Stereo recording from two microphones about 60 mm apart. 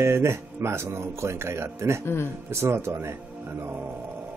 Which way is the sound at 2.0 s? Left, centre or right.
Left.